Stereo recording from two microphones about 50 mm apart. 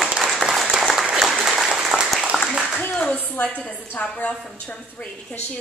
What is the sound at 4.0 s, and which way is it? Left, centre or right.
Speech, left.